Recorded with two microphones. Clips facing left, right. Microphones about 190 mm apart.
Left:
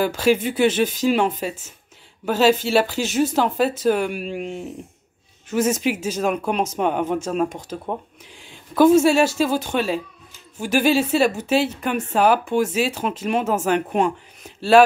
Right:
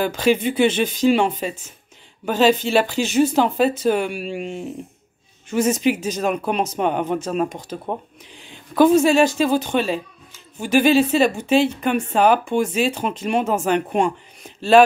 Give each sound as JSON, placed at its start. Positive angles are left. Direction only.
{"t": 0.0, "sound": "a woman's voice", "side_deg": 5}
{"t": 7.7, "sound": "a woman's voice", "side_deg": -5}
{"t": 8.5, "sound": "a woman's voice", "side_deg": 5}